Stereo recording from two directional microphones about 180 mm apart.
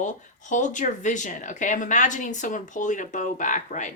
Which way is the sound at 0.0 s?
45° left (ahead or behind).